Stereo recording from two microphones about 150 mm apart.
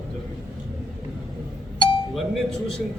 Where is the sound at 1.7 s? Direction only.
35° left (ahead or behind).